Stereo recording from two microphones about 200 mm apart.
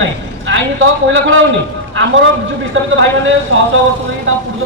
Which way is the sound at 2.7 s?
75° right (ahead or behind).